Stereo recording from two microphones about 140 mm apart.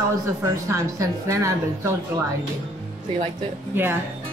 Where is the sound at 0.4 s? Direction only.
25° right (ahead or behind).